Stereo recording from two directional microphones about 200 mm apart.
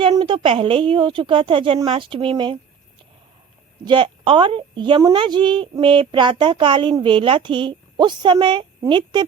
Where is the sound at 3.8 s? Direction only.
25° right (ahead or behind).